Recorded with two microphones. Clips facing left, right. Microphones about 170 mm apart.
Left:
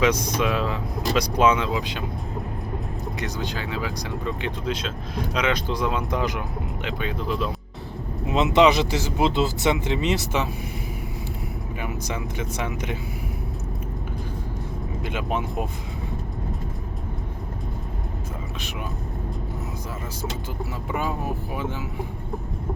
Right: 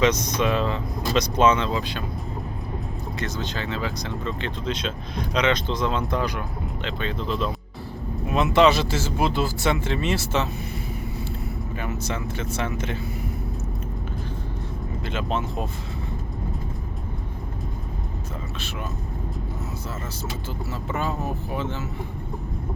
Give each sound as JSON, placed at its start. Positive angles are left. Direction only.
{"t": 0.0, "sound": "speech", "side_deg": 10}
{"t": 3.2, "sound": "speech", "side_deg": 15}
{"t": 11.8, "sound": "speech", "side_deg": 15}
{"t": 15.0, "sound": "speech", "side_deg": 15}
{"t": 20.9, "sound": "speech", "side_deg": 15}